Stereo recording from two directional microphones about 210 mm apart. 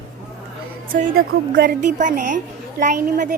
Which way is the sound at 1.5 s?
50° right (ahead or behind).